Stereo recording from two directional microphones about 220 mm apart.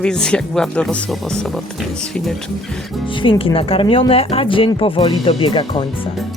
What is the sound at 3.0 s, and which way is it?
Speech, 25° left (ahead or behind).